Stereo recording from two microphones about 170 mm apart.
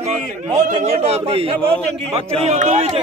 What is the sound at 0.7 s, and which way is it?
A man's voice, 35° right (ahead or behind).